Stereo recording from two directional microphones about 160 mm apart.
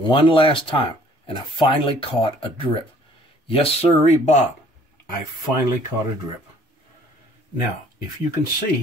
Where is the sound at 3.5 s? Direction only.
40° left (ahead or behind).